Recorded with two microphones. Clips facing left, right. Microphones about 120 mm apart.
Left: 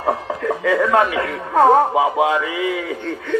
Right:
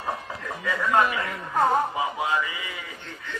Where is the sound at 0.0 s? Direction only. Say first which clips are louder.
Left 11 dB; 90° left.